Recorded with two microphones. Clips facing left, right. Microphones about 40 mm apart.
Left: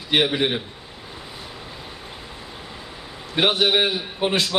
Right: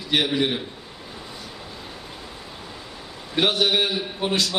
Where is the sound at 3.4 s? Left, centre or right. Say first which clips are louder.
Left 2 dB; left.